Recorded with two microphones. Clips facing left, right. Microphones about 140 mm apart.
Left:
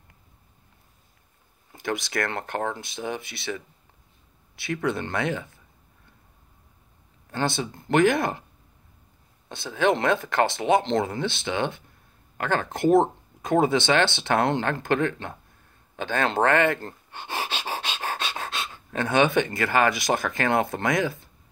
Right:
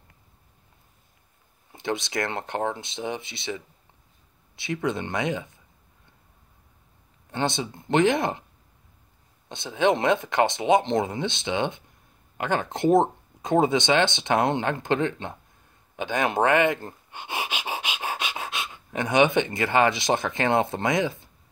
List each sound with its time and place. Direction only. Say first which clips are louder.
1.7 s speech: even; 20° right (ahead or behind)
7.2 s speech: even; 20° right (ahead or behind)
9.5 s speech: right 1 dB; 20° right (ahead or behind)